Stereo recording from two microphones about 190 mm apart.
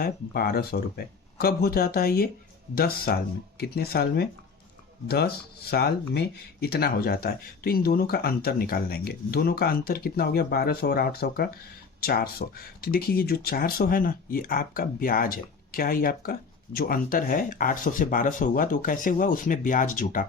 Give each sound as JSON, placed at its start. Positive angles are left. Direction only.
{"t": 0.0, "sound": "speech", "side_deg": 50}